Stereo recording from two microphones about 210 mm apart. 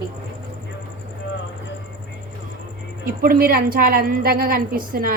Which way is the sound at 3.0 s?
45° right (ahead or behind).